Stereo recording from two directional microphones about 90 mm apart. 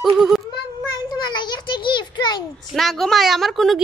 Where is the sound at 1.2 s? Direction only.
55° left (ahead or behind).